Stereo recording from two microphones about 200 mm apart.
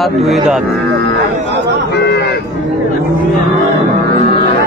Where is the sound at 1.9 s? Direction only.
55° left (ahead or behind).